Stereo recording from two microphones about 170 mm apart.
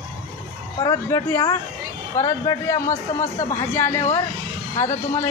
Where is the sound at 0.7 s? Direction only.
20° left (ahead or behind).